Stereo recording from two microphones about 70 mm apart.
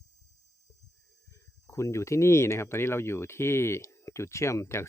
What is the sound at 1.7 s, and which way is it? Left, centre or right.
Speech, left.